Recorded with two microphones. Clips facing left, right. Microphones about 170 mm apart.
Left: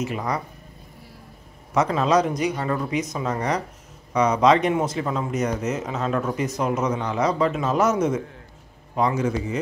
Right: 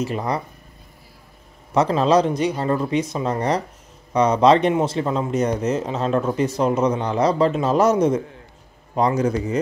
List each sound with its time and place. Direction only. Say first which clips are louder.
0.0 s speech: right 3 dB; 30° right (ahead or behind)
1.7 s speech: right 3 dB; 30° right (ahead or behind)